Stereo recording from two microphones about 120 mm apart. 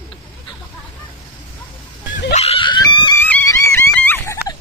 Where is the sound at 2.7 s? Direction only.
35° left (ahead or behind).